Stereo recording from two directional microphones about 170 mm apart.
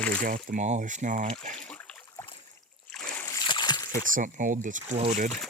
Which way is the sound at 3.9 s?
50° right (ahead or behind).